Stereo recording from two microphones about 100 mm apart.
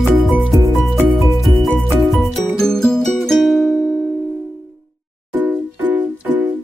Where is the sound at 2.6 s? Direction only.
5° left (ahead or behind).